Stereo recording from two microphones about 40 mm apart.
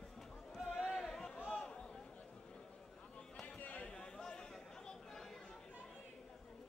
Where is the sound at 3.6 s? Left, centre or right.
Left.